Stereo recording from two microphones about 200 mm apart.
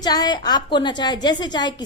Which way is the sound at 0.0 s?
20° left (ahead or behind).